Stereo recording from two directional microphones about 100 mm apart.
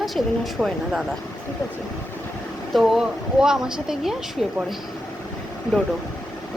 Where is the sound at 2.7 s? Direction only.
5° right (ahead or behind).